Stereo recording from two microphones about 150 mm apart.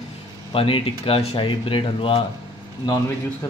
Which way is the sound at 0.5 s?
35° left (ahead or behind).